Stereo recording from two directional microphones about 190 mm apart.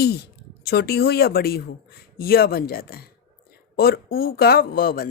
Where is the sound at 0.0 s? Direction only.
55° left (ahead or behind).